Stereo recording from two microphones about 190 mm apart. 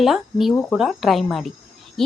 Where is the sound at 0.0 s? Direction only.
Centre (ahead or behind).